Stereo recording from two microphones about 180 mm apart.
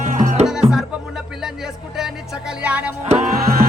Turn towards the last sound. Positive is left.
turn(degrees=-55)  # may be behind; listen again after turning